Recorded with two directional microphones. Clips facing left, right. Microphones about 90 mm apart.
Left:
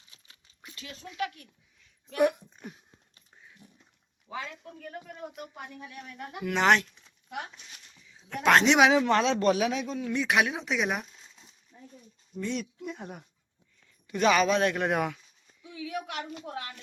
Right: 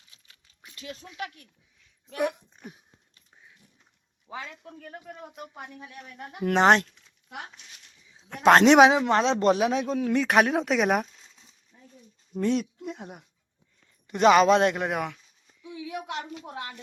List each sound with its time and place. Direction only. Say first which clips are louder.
0.6 s speech: right 3 dB; 10° right (ahead or behind)
2.1 s speech: left 3 dB; 5° left (ahead or behind)
2.6 s a sound: even; 10° right (ahead or behind)
3.6 s dog: left 6 dB; 20° left (ahead or behind)
4.3 s a man's voice: left 1 dB; 15° right (ahead or behind)
5.9 s speech: left 1 dB; 35° right (ahead or behind)
8.4 s speech: right 5 dB; 40° right (ahead or behind)
8.9 s a man's voice: right 1 dB; 20° right (ahead or behind); by 11.0 s 60° right (ahead or behind)
12.3 s speech: right 7 dB; 45° right (ahead or behind)
14.1 s speech: right 5 dB; 25° right (ahead or behind)
14.8 s speech: left 2 dB; centre (ahead or behind)
15.8 s a sound: even; 15° right (ahead or behind)
16.6 s speech: right 3 dB; 20° right (ahead or behind)